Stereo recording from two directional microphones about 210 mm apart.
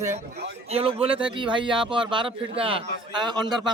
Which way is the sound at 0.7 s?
25° right (ahead or behind).